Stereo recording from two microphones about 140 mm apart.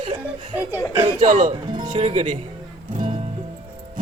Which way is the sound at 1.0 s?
55° right (ahead or behind).